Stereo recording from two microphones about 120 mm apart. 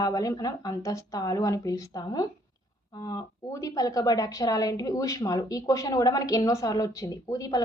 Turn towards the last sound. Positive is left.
turn(degrees=30)  # may be behind; listen again after turning